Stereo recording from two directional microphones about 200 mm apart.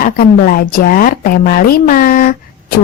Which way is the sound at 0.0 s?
45° left (ahead or behind).